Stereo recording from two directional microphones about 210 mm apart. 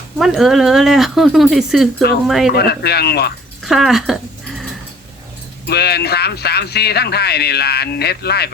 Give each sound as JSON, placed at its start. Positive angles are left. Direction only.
{"t": 0.2, "sound": "speech", "side_deg": 0}
{"t": 2.6, "sound": "speech", "side_deg": 50}
{"t": 3.6, "sound": "speech", "side_deg": 0}
{"t": 5.6, "sound": "speech", "side_deg": 50}